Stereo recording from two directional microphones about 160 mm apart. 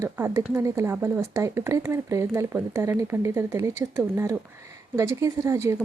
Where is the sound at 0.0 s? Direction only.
20° right (ahead or behind).